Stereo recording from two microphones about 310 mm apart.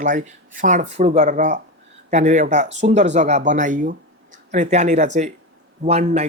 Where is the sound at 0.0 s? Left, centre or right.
Right.